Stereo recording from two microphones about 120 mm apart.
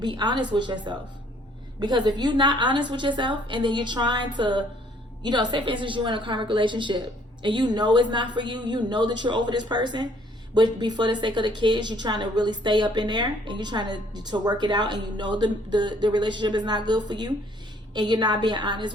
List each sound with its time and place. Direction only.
0.0 s a woman's voice: 40° right (ahead or behind)